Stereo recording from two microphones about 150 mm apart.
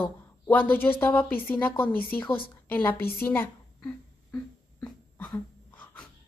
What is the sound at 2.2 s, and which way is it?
Speech, 35° left (ahead or behind).